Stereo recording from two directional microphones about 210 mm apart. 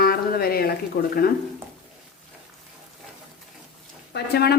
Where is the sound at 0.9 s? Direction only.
45° left (ahead or behind).